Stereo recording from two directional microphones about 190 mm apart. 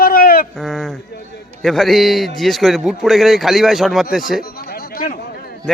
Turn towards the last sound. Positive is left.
turn(degrees=50)  # may be behind; listen again after turning